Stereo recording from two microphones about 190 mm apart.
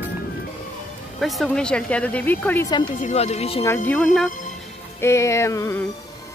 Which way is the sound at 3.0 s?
35° left (ahead or behind).